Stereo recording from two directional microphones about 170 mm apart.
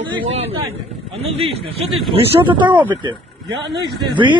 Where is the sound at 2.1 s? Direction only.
30° right (ahead or behind).